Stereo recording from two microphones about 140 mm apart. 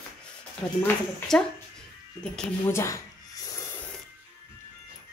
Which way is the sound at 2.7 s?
20° left (ahead or behind).